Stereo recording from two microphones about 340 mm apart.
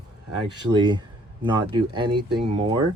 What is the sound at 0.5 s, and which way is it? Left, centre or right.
Speech, centre.